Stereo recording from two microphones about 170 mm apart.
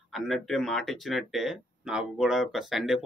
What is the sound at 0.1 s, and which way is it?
Speech, centre (ahead or behind).